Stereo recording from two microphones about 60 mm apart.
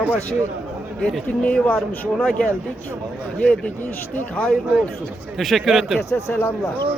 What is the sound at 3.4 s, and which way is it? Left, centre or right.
A man's voice, left.